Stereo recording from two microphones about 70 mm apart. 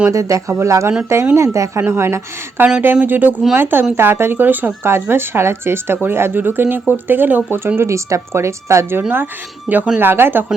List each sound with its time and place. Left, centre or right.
0.1 s speech: right
2.8 s speech: right
7.8 s speech: right